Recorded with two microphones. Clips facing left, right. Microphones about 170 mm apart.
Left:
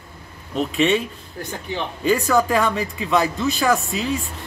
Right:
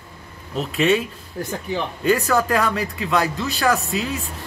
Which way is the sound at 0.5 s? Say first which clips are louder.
Even; centre (ahead or behind).